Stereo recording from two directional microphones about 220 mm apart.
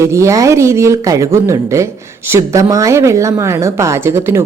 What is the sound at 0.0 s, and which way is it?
Speech, 15° right (ahead or behind).